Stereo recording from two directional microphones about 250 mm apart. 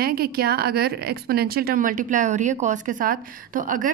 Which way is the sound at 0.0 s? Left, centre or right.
Right.